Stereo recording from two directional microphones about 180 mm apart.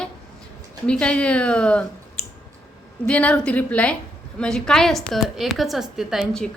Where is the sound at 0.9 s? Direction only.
5° left (ahead or behind).